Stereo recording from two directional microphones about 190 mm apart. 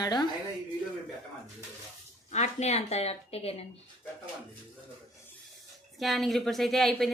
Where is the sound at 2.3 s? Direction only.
35° left (ahead or behind).